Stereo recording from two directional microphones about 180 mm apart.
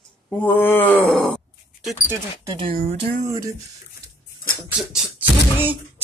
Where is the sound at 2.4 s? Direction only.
20° right (ahead or behind).